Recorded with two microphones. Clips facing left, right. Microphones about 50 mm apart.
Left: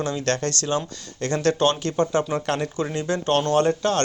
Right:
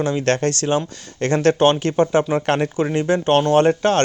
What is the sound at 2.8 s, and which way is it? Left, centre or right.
Speech, right.